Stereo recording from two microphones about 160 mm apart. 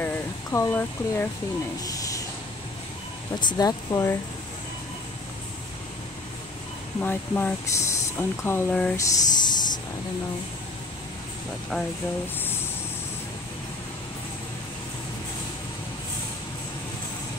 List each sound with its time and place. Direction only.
0.0 s a sound: 15° left (ahead or behind)
3.3 s speech: 25° left (ahead or behind)
7.0 s speech: 10° left (ahead or behind)
11.7 s speech: centre (ahead or behind)